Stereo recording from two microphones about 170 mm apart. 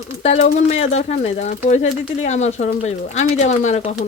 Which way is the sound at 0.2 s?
40° left (ahead or behind).